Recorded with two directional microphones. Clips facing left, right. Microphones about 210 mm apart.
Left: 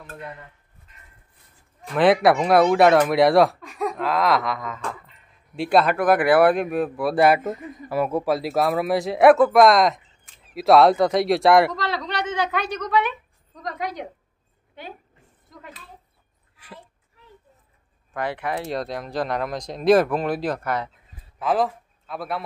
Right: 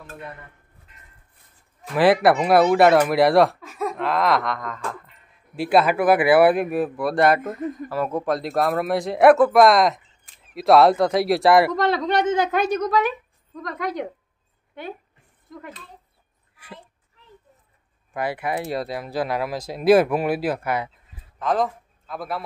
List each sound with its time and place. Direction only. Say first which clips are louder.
1.9 s speech: even; 5° right (ahead or behind)
11.7 s a woman's voice: right 7 dB; 55° right (ahead or behind)
13.6 s a woman's voice: right 3 dB; 55° right (ahead or behind)
18.1 s speech: right 1 dB; 10° right (ahead or behind)
21.4 s a man's voice: even; 5° left (ahead or behind)